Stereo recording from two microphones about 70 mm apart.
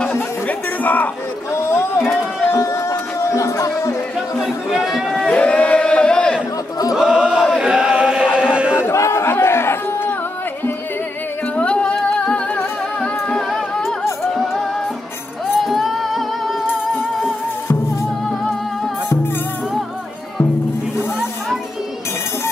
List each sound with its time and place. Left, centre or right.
0.0 s chatter: centre
1.5 s a sound: left
2.6 s music: left
4.7 s speech: centre
5.3 s a sound: centre
7.0 s chant: centre
8.4 s a sound: centre
8.8 s chatter: left
11.5 s music: centre
13.5 s music: centre